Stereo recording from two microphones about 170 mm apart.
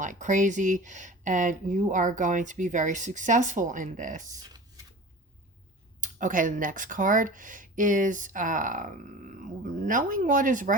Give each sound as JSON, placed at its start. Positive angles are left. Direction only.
{"t": 0.0, "sound": "speech", "side_deg": -45}
{"t": 4.4, "sound": "a sound", "side_deg": -20}
{"t": 6.0, "sound": "speech", "side_deg": -50}